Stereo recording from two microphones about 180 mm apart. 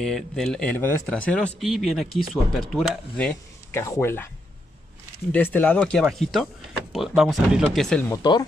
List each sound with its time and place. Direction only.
0.0 s speech: 5° left (ahead or behind)
5.3 s speech: 10° left (ahead or behind)
8.1 s speech: 20° left (ahead or behind)